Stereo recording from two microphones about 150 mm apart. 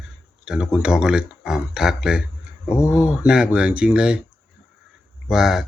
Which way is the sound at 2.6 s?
15° left (ahead or behind).